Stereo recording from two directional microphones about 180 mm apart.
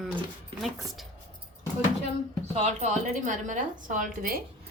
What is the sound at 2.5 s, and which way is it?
A woman's voice, 40° right (ahead or behind).